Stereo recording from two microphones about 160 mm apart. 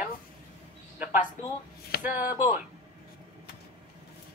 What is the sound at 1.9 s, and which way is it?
Speech, 75° left (ahead or behind).